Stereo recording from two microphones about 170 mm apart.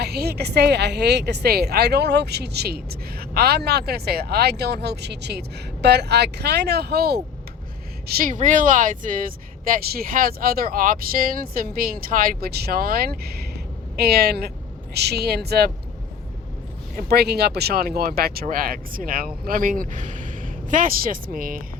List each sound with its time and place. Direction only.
0.0 s speech: 70° right (ahead or behind)
17.0 s speech: 70° right (ahead or behind)